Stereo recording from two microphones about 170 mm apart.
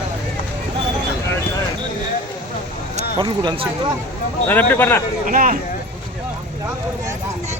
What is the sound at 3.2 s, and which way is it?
Speech, 25° right (ahead or behind).